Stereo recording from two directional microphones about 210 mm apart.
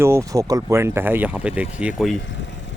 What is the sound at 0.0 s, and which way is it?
Speech, 15° right (ahead or behind).